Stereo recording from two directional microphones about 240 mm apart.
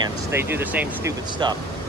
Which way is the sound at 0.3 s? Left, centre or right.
Centre.